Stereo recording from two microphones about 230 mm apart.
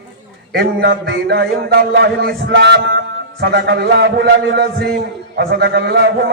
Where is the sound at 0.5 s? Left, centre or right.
Right.